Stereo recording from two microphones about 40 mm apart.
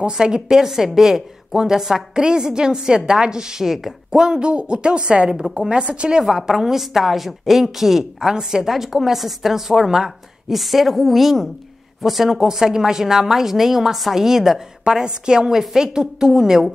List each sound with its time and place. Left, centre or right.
0.0 s a woman's voice: centre
4.2 s speech: right
6.3 s a woman's voice: centre